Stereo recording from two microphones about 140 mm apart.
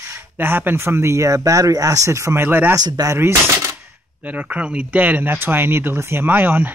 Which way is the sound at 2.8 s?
25° right (ahead or behind).